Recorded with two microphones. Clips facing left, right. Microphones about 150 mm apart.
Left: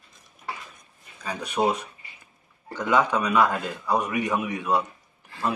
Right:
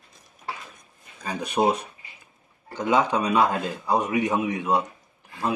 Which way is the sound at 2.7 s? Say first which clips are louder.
Right 1 dB; 20° right (ahead or behind).